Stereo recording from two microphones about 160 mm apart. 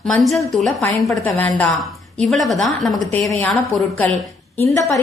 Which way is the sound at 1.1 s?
10° left (ahead or behind).